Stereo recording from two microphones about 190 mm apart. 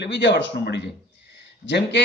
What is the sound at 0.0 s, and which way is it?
A man's voice, 65° left (ahead or behind).